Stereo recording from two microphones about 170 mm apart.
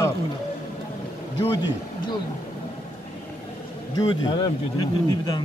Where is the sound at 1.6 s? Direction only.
25° left (ahead or behind).